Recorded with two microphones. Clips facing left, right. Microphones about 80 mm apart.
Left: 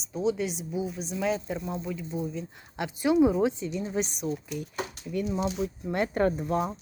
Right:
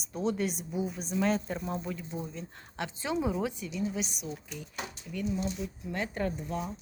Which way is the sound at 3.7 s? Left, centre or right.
Left.